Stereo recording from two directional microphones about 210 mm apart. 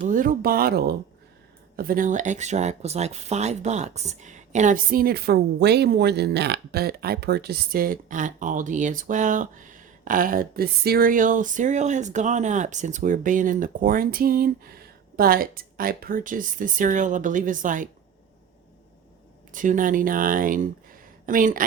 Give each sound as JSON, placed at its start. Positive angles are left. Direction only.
{"t": 0.0, "sound": "speech", "side_deg": -40}
{"t": 19.5, "sound": "speech", "side_deg": -40}